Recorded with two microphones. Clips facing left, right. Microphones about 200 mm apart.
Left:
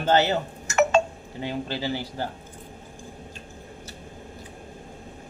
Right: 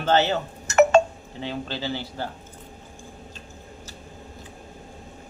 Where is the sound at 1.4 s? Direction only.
10° left (ahead or behind).